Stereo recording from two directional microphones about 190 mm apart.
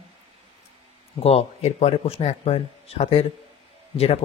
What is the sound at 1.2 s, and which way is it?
Speech, 30° left (ahead or behind).